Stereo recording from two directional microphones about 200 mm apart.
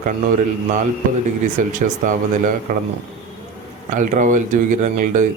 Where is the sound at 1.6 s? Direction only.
40° right (ahead or behind).